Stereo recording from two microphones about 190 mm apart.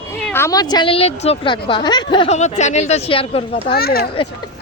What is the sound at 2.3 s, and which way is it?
Speech, 35° left (ahead or behind).